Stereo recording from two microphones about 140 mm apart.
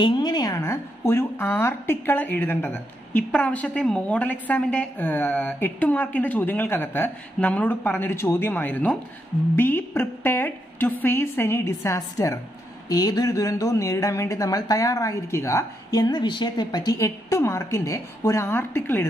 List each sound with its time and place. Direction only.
0.0 s a woman's voice: 30° left (ahead or behind)